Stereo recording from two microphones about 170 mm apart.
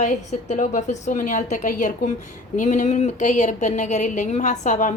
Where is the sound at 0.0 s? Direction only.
45° left (ahead or behind).